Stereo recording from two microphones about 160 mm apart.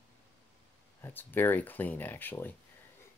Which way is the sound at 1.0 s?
10° left (ahead or behind).